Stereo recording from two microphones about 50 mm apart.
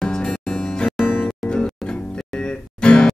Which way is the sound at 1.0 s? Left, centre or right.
Left.